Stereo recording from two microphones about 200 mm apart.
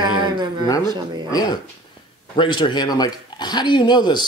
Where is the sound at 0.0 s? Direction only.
20° right (ahead or behind).